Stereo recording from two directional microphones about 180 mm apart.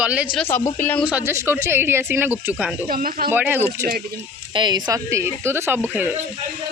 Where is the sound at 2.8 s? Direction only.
55° right (ahead or behind).